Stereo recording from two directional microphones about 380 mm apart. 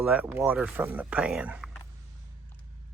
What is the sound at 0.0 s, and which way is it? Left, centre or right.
Speech, centre.